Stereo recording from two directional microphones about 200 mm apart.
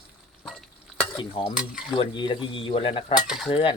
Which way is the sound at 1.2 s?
25° left (ahead or behind).